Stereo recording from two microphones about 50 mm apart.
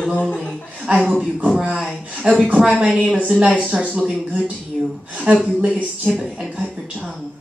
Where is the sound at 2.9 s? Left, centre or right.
Centre.